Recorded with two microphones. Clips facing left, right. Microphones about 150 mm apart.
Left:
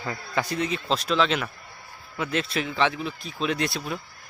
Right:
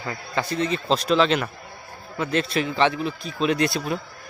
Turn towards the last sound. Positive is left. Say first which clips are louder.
# right 5 dB
turn(degrees=0)  # may be behind; listen again after turning